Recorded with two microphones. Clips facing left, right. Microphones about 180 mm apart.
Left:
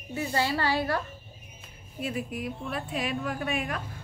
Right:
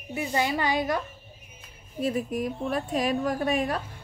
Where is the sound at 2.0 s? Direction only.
40° right (ahead or behind).